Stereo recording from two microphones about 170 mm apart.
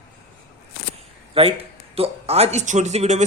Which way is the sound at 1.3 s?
35° right (ahead or behind).